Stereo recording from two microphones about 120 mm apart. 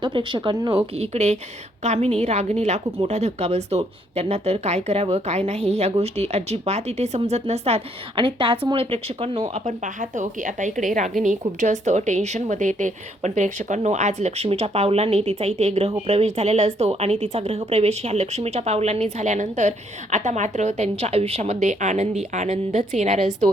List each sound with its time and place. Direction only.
0.0 s speech: 40° right (ahead or behind)
0.9 s a woman's voice: 60° right (ahead or behind)
8.2 s speech: 45° right (ahead or behind)
9.6 s a woman's voice: 90° right; by 23.3 s 70° right (ahead or behind)